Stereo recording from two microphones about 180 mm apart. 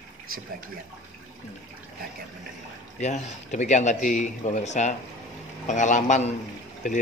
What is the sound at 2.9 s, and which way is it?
Speech, 40° left (ahead or behind).